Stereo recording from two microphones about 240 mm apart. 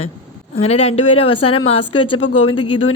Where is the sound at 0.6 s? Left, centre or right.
Left.